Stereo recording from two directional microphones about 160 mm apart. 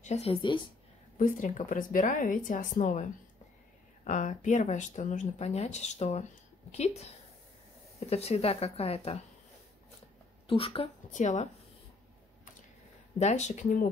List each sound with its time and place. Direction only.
0.0 s speech: 40° left (ahead or behind)
1.1 s speech: 55° left (ahead or behind)
8.1 s speech: 40° left (ahead or behind)
10.4 s speech: 35° left (ahead or behind)
11.1 s speech: 50° left (ahead or behind)
13.2 s speech: 45° left (ahead or behind)